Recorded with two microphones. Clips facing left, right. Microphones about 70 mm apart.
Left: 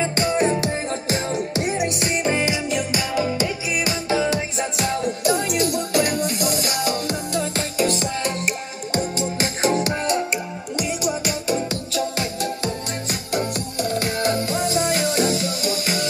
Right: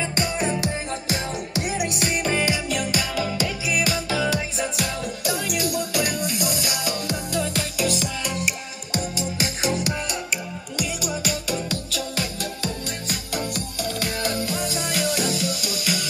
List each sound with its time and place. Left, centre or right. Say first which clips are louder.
0.0 s music: left 5 dB; left
2.2 s music: left 2 dB; centre
3.2 s music: left 3 dB; left